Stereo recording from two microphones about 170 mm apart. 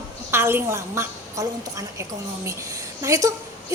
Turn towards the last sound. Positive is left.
turn(degrees=-20)  # may be behind; listen again after turning